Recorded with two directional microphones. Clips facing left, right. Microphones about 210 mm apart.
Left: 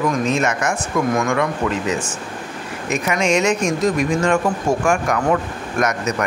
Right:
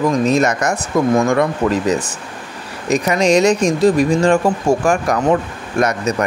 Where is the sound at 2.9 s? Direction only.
35° right (ahead or behind).